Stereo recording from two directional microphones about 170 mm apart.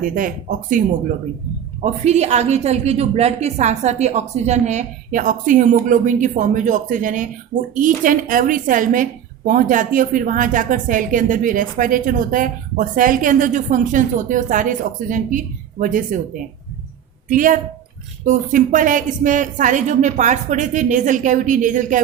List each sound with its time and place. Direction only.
0.0 s a woman's voice: 50° right (ahead or behind)
1.8 s a woman's voice: 40° right (ahead or behind)
17.2 s a woman's voice: 50° right (ahead or behind)